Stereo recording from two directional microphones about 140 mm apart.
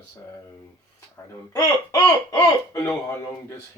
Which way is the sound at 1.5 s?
25° left (ahead or behind).